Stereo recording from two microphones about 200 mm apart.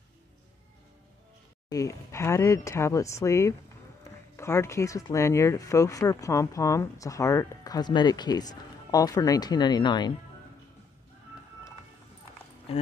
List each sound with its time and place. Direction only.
1.7 s speech: 15° left (ahead or behind)
12.7 s speech: 30° left (ahead or behind)